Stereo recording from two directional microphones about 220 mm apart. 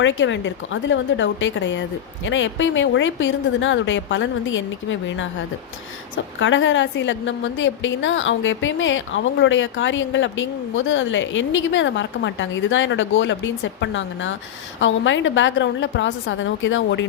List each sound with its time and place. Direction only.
0.0 s a woman's voice: 55° left (ahead or behind)
6.4 s a woman's voice: 60° left (ahead or behind)